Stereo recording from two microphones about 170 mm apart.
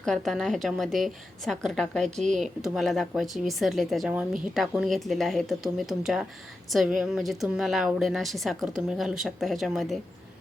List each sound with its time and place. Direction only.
0.0 s a woman's voice: centre (ahead or behind)